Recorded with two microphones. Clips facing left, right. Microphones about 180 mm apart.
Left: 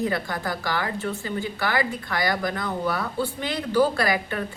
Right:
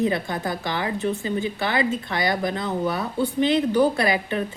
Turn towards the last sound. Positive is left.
turn(degrees=-20)  # may be behind; listen again after turning